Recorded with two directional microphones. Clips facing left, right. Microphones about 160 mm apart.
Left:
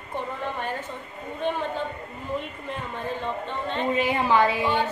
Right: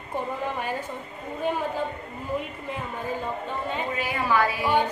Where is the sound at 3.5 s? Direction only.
5° right (ahead or behind).